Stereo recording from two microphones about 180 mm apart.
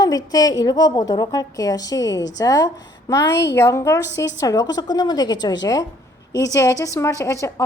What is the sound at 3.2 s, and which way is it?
Speech, 75° left (ahead or behind).